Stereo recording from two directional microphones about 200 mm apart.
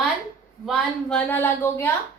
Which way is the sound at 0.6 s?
Centre (ahead or behind).